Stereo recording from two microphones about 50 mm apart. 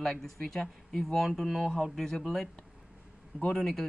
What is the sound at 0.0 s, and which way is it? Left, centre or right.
Speech, centre.